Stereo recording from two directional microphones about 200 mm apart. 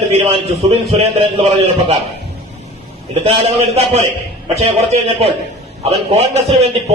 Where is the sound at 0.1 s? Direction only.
30° right (ahead or behind).